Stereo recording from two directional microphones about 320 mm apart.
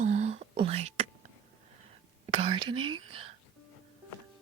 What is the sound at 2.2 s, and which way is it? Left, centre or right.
Whispering, centre.